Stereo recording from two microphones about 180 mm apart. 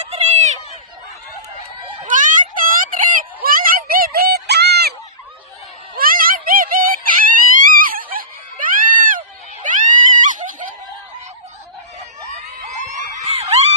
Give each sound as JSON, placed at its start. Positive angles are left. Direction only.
{"t": 0.1, "sound": "run", "side_deg": -40}
{"t": 2.0, "sound": "a sound", "side_deg": -45}
{"t": 6.0, "sound": "screaming", "side_deg": -50}
{"t": 9.6, "sound": "neigh", "side_deg": -45}
{"t": 12.7, "sound": "screaming", "side_deg": -40}